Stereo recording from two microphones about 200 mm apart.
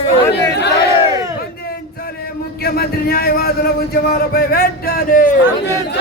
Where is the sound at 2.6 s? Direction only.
50° left (ahead or behind).